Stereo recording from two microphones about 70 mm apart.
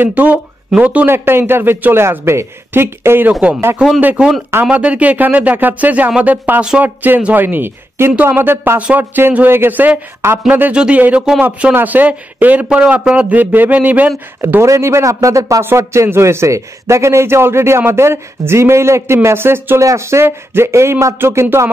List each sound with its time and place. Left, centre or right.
0.0 s speech: right
1.0 s a man's voice: right
4.6 s speech: centre
10.2 s a man's voice: right
10.7 s speech: centre
14.6 s a man's voice: right
19.8 s a man's voice: right